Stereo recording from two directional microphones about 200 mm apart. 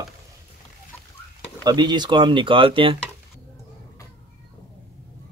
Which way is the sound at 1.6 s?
20° right (ahead or behind).